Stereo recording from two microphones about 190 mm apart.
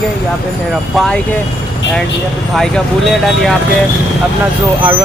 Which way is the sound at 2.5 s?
Centre (ahead or behind).